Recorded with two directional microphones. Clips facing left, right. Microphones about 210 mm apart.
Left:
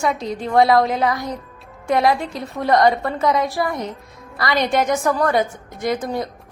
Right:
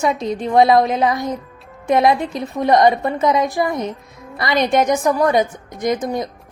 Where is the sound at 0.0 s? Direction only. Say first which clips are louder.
Right 3 dB; 20° right (ahead or behind).